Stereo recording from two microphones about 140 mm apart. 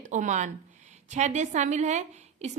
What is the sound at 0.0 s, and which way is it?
A woman's voice, 60° right (ahead or behind).